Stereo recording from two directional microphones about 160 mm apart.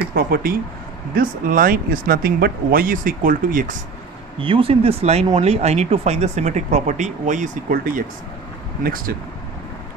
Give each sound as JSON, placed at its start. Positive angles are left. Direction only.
{"t": 0.1, "sound": "speech", "side_deg": -65}
{"t": 4.4, "sound": "speech", "side_deg": -35}